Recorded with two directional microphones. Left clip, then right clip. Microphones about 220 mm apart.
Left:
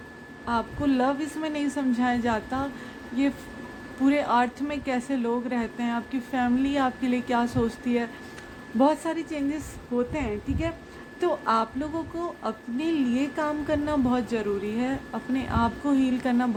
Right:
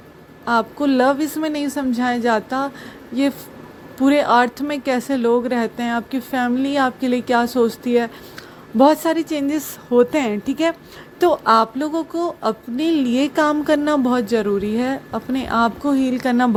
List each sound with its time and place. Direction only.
0.4 s speech: 30° right (ahead or behind)
4.0 s a woman's voice: 30° right (ahead or behind)